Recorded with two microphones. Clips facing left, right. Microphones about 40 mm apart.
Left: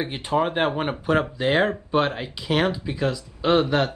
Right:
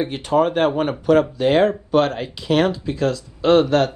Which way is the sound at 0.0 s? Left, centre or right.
Centre.